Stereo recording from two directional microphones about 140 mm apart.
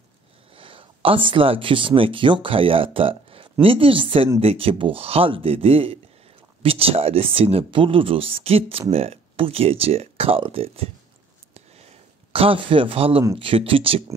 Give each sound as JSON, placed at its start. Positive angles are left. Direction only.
{"t": 0.6, "sound": "speech", "side_deg": -40}
{"t": 11.5, "sound": "a sound", "side_deg": -50}
{"t": 13.4, "sound": "speech", "side_deg": -40}